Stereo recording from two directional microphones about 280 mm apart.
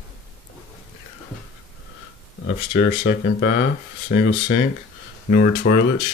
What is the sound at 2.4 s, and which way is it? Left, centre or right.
Speech, left.